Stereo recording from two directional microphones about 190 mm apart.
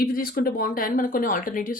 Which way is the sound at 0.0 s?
50° left (ahead or behind).